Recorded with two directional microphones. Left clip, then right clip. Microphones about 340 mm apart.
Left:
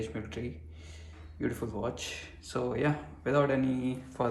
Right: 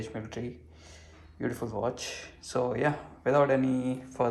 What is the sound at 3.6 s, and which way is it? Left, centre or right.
Speech, right.